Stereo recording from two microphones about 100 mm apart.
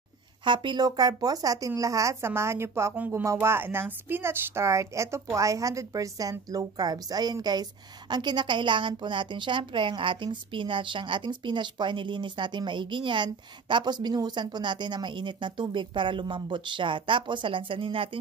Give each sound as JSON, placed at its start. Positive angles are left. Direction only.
{"t": 0.5, "sound": "a woman's voice", "side_deg": -50}